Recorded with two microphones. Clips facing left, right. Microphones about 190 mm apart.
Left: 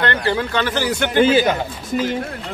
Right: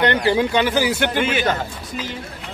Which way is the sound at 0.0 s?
15° right (ahead or behind).